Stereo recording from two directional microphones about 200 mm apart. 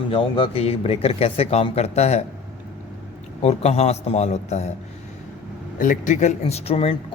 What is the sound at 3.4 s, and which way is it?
Speech, 35° left (ahead or behind).